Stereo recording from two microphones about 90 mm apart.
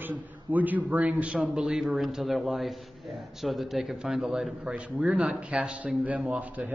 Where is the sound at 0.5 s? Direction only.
20° right (ahead or behind).